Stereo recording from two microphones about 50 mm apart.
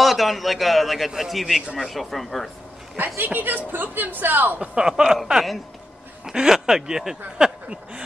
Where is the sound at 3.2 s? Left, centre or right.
Right.